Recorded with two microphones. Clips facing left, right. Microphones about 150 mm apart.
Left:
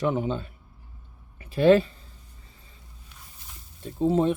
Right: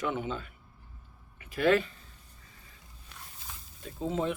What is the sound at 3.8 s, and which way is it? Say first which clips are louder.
Speech: left 9 dB; 35° left (ahead or behind).